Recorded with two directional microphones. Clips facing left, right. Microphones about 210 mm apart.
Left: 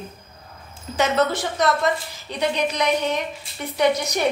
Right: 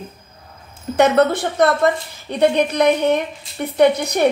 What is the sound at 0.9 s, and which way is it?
A woman's voice, 60° right (ahead or behind).